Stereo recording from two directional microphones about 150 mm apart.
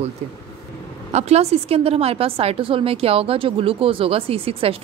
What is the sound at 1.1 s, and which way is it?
A woman's voice, 45° right (ahead or behind).